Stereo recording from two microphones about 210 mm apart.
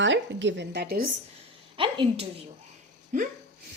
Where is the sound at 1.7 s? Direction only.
25° right (ahead or behind).